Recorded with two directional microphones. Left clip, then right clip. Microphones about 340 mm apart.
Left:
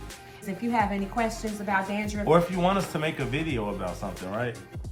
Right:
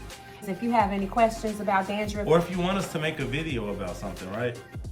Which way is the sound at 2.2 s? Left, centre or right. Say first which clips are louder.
Left 2 dB; centre.